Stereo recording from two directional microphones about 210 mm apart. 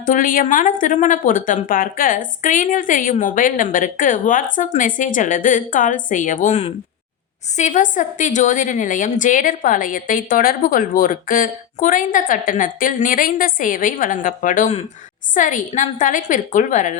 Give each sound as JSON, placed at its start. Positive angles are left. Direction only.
{"t": 0.0, "sound": "a woman's voice", "side_deg": 40}